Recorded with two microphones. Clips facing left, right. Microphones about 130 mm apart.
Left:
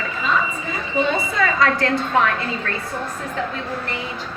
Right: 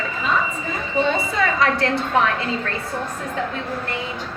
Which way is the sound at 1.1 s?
25° right (ahead or behind).